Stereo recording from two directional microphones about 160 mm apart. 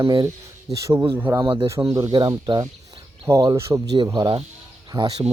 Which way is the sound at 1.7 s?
20° right (ahead or behind).